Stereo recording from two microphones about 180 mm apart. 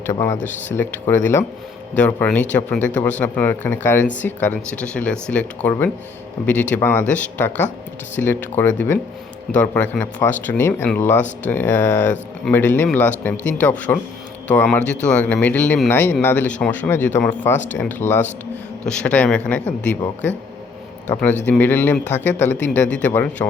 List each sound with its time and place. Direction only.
0.0 s speech: 15° left (ahead or behind)
21.4 s speech: 10° left (ahead or behind)